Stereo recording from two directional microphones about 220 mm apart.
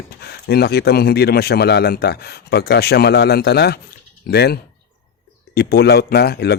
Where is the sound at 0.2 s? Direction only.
45° left (ahead or behind).